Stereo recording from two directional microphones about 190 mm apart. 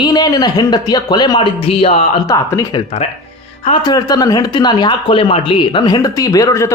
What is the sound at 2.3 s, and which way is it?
Speech, 20° left (ahead or behind).